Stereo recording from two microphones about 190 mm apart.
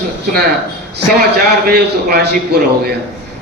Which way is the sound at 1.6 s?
55° right (ahead or behind).